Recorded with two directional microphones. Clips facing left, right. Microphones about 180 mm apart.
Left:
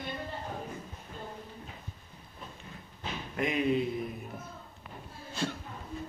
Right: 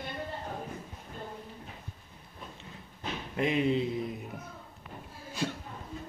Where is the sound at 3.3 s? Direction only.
25° right (ahead or behind).